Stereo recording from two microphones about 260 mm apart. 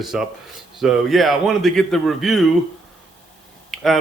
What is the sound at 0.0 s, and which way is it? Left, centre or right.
A man's voice, centre.